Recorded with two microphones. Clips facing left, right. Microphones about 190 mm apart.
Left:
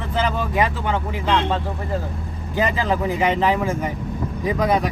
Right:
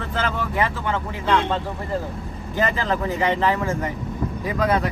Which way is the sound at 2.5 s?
15° left (ahead or behind).